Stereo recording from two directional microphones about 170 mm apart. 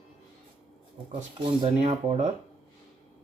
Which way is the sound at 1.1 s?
30° right (ahead or behind).